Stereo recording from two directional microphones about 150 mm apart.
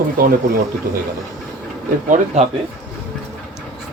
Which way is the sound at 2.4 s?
45° right (ahead or behind).